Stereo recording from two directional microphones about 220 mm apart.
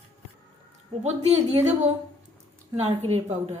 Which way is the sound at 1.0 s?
30° right (ahead or behind).